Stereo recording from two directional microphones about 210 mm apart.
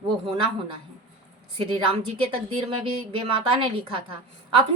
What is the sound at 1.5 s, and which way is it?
A woman's voice, 25° right (ahead or behind).